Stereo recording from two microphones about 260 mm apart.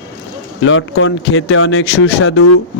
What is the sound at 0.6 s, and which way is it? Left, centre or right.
Speech, left.